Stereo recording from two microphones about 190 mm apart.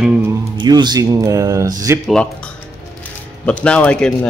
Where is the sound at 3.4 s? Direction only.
5° left (ahead or behind).